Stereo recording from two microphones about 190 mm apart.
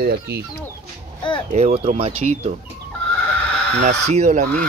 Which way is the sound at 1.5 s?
35° right (ahead or behind).